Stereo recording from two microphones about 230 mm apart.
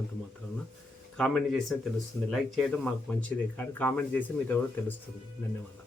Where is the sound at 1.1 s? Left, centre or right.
Centre.